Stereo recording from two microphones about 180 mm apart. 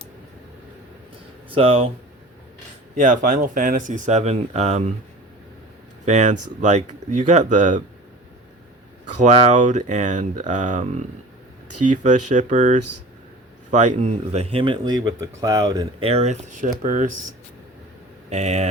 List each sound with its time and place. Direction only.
1.5 s speech: 30° right (ahead or behind)
2.9 s speech: 45° right (ahead or behind)
6.1 s speech: 40° right (ahead or behind)
9.2 s speech: 40° right (ahead or behind); by 16.0 s 20° right (ahead or behind)
16.0 s speech: 35° right (ahead or behind)
18.3 s speech: 35° right (ahead or behind)